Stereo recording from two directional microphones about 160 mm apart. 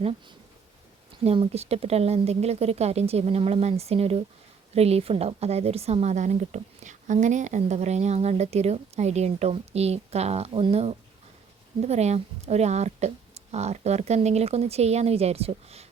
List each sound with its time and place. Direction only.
1.2 s a woman's voice: 40° right (ahead or behind)